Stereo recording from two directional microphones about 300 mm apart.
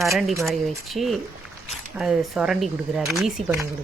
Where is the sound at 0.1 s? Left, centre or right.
Centre.